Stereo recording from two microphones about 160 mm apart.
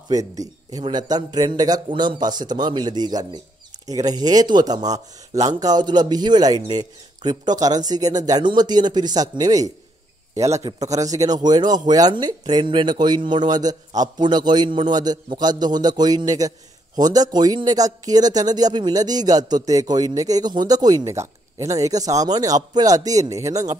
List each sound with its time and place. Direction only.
0.1 s speech: 20° right (ahead or behind)